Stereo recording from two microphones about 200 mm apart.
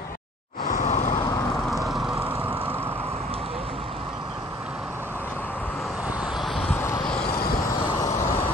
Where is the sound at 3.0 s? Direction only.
30° right (ahead or behind).